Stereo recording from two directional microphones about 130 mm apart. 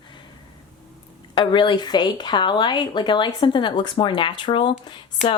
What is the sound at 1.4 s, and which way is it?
Speech, 40° left (ahead or behind).